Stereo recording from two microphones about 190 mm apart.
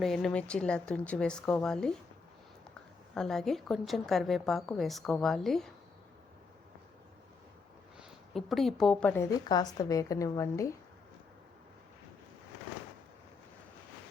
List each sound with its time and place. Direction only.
0.0 s a woman's voice: centre (ahead or behind)
3.2 s a woman's voice: centre (ahead or behind)
7.9 s a woman's voice: centre (ahead or behind); by 10.8 s 15° left (ahead or behind)